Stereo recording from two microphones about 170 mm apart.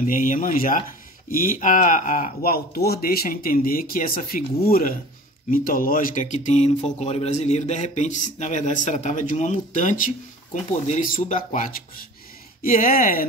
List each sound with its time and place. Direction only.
0.0 s speech: 50° left (ahead or behind)